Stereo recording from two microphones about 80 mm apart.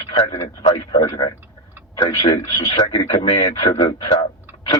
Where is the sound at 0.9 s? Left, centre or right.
Left.